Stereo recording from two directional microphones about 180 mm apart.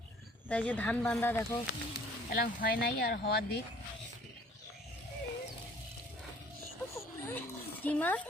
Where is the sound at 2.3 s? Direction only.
50° left (ahead or behind).